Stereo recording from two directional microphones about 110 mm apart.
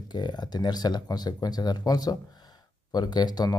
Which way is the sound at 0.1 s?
40° left (ahead or behind).